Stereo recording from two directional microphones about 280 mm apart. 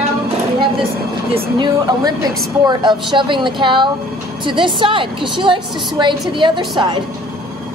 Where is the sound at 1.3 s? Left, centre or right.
Centre.